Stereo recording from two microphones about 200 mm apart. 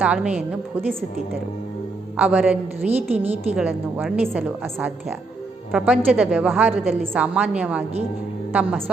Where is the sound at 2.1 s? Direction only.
5° right (ahead or behind).